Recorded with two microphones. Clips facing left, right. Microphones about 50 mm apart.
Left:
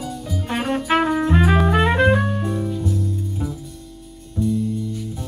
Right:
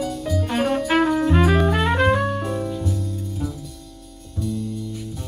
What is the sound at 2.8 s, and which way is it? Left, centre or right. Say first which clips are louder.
Music: left 3 dB; centre.